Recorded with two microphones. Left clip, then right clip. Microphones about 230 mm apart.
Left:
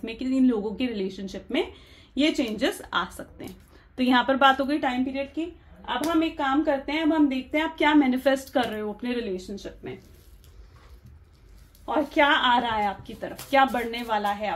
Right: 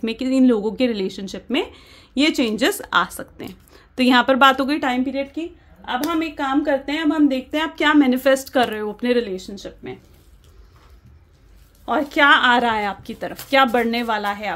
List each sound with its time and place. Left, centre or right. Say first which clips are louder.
0.0 s a woman's voice: right 6 dB; right
11.8 s a woman's voice: right 5 dB; right